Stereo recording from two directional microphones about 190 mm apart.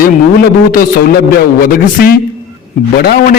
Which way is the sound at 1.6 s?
50° left (ahead or behind).